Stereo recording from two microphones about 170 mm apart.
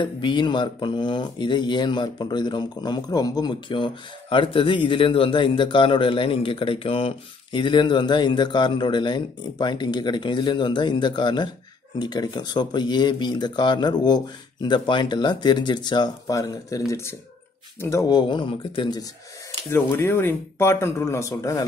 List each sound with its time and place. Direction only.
0.0 s speech: 25° left (ahead or behind)
19.7 s speech: 15° left (ahead or behind)